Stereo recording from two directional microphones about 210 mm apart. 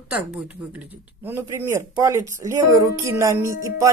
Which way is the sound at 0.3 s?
5° right (ahead or behind).